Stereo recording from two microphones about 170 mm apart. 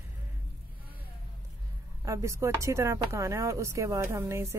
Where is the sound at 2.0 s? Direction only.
15° right (ahead or behind).